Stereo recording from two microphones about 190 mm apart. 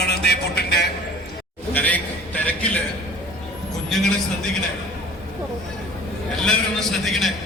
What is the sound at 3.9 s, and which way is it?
Speech, centre (ahead or behind).